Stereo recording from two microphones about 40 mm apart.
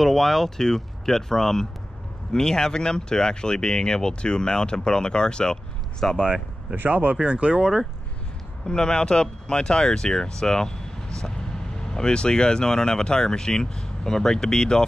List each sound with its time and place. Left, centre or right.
0.0 s speech: centre
6.1 s speech: right
6.7 s speech: right
7.2 s speech: right
8.6 s speech: centre